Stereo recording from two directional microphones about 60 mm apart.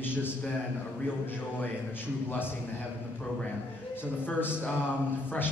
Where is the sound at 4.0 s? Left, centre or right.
Left.